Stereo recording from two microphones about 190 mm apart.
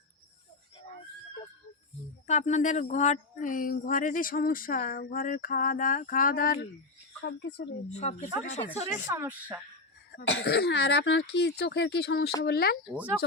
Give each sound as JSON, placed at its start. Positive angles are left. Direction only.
{"t": 2.2, "sound": "speech", "side_deg": 35}
{"t": 7.3, "sound": "speech", "side_deg": 65}
{"t": 7.9, "sound": "speech", "side_deg": 35}
{"t": 9.0, "sound": "speech", "side_deg": -10}
{"t": 10.2, "sound": "speech", "side_deg": 65}
{"t": 12.9, "sound": "speech", "side_deg": -5}